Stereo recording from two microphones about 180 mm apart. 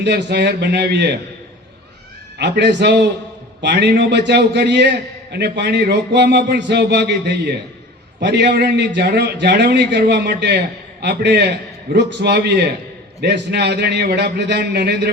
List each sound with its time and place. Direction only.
0.0 s a man's voice: 70° right (ahead or behind)
2.4 s a man's voice: 70° right (ahead or behind)